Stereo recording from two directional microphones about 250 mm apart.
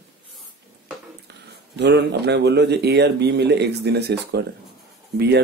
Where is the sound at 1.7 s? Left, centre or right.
Right.